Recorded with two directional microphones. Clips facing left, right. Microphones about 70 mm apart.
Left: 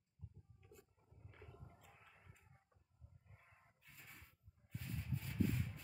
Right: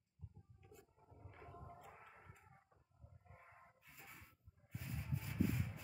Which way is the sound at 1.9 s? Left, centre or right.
Right.